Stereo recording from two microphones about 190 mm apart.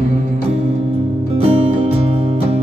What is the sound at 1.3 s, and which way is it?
Music, 30° right (ahead or behind).